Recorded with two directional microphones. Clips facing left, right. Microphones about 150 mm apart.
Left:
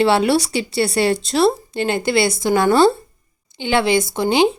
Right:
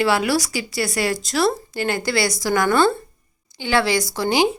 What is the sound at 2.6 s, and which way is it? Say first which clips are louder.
Speech: left 5 dB; 15° left (ahead or behind).